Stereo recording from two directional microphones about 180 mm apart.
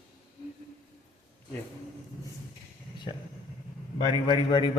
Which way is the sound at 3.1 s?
25° left (ahead or behind).